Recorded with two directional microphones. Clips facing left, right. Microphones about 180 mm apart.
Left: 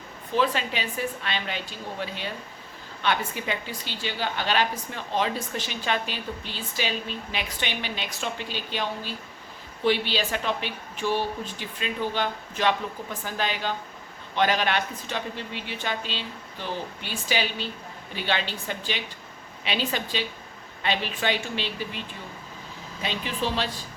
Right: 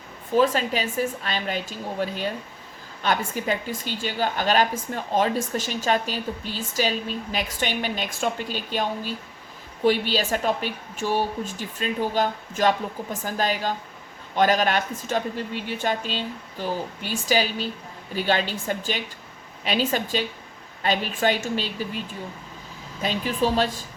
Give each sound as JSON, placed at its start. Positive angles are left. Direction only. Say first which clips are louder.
{"t": 0.3, "sound": "a woman's voice", "louder": "right 5 dB", "side_deg": -45}
{"t": 23.0, "sound": "a woman's voice", "louder": "right 5 dB", "side_deg": -45}